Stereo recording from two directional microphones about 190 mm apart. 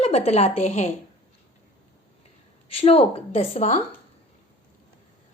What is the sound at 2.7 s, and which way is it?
Speech, 30° left (ahead or behind).